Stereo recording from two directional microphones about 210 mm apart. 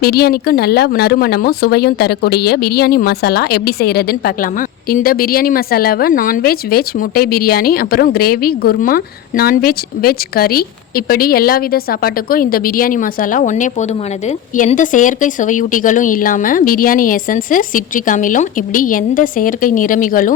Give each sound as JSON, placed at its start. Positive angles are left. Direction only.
{"t": 0.0, "sound": "a woman's voice", "side_deg": 50}